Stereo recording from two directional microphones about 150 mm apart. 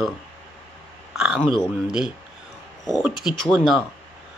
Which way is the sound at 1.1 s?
5° right (ahead or behind).